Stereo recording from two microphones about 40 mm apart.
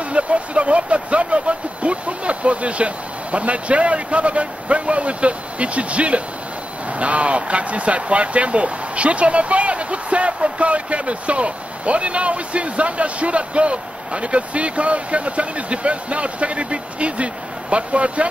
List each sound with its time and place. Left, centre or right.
0.1 s speech: right